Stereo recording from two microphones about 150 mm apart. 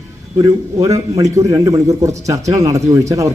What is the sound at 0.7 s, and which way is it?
Speech, 20° right (ahead or behind).